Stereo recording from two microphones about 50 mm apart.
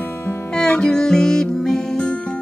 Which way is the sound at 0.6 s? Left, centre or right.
Centre.